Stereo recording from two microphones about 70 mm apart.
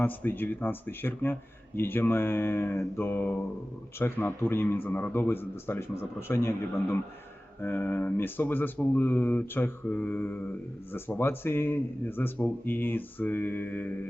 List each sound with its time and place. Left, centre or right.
0.0 s speech: left
7.6 s speech: left